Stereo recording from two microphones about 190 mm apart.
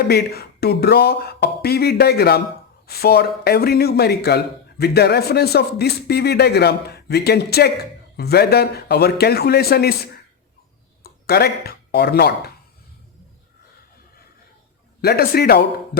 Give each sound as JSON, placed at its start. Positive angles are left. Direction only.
{"t": 0.1, "sound": "speech", "side_deg": 55}
{"t": 15.0, "sound": "speech", "side_deg": 55}